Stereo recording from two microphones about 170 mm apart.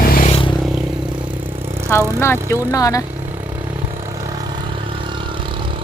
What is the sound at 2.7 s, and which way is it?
Speech, 20° left (ahead or behind).